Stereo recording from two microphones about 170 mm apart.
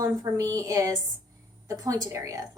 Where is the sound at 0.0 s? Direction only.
20° right (ahead or behind).